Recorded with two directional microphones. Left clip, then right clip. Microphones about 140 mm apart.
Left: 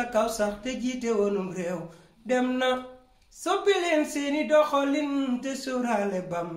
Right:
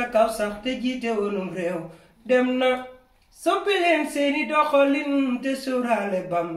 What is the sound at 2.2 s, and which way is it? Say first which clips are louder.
Speech: right 5 dB; 35° left (ahead or behind).